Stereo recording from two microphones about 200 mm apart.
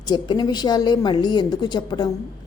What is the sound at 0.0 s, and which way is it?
A woman's voice, 20° left (ahead or behind).